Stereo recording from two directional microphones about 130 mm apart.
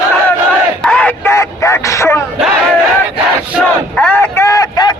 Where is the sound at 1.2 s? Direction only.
20° left (ahead or behind).